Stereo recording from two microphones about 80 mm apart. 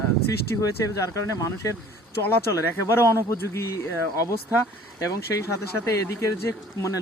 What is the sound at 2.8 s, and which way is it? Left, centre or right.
Speech, left.